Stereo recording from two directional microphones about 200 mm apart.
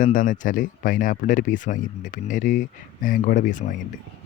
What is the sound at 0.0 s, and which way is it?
Speech, 40° left (ahead or behind).